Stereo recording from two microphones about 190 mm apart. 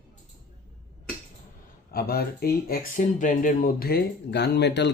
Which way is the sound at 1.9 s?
55° left (ahead or behind).